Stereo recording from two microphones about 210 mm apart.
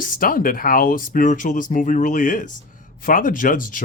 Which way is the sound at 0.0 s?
40° left (ahead or behind).